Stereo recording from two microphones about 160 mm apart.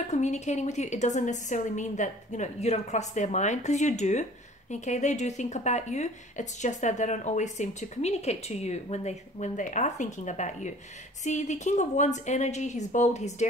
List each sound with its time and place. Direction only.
0.1 s a woman's voice: 45° left (ahead or behind)